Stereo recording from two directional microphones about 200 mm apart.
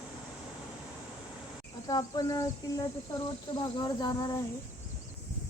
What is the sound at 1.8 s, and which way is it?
Insect, 20° left (ahead or behind).